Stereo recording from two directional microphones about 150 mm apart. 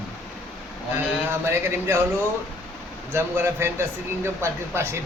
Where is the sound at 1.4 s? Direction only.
15° right (ahead or behind).